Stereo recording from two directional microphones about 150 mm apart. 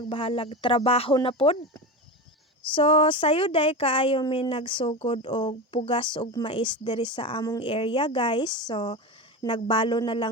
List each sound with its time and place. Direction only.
0.1 s a woman's voice: 40° left (ahead or behind)
2.7 s a woman's voice: 35° left (ahead or behind)